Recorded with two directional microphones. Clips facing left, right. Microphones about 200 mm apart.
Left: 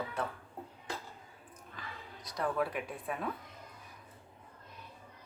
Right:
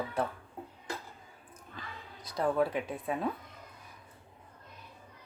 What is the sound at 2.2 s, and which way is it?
Speech, 30° right (ahead or behind).